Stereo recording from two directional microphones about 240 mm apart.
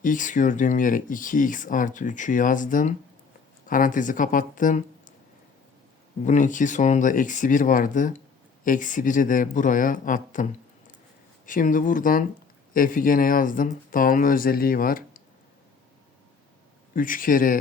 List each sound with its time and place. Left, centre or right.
0.0 s speech: left
6.2 s speech: left
16.9 s speech: left